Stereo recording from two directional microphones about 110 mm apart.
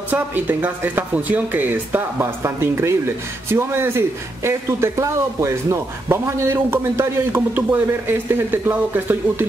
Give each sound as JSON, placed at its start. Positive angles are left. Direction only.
{"t": 0.1, "sound": "speech", "side_deg": -15}